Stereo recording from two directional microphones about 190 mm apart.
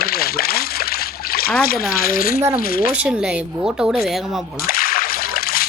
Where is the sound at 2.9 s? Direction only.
5° right (ahead or behind).